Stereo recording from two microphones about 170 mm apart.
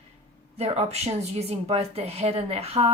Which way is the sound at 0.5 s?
40° right (ahead or behind).